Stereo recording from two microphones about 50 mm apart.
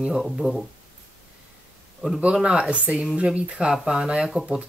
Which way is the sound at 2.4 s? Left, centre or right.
Centre.